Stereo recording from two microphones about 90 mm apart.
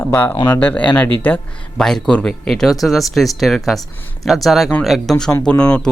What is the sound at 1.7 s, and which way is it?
Speech, 5° left (ahead or behind).